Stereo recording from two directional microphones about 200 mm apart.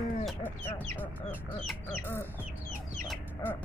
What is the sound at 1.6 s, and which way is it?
Speech, 10° left (ahead or behind).